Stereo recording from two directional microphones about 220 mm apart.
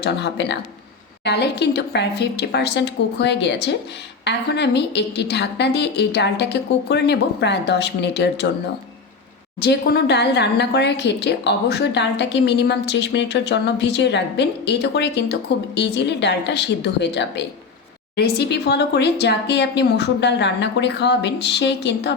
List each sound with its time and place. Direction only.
0.0 s a woman's voice: 50° left (ahead or behind)
9.6 s a woman's voice: 45° left (ahead or behind)